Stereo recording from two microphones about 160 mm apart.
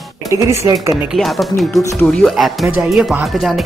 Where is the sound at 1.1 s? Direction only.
Centre (ahead or behind).